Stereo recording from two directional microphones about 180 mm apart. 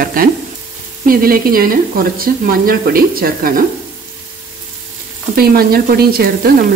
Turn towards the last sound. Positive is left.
turn(degrees=-60)  # may be behind; listen again after turning